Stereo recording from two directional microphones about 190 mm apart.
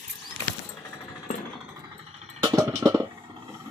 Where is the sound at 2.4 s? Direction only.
15° right (ahead or behind).